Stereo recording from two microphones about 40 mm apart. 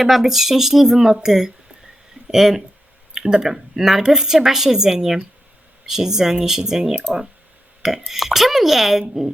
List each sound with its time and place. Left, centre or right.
0.0 s a woman's voice: centre